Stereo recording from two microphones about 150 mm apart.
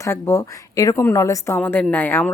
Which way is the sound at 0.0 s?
15° left (ahead or behind).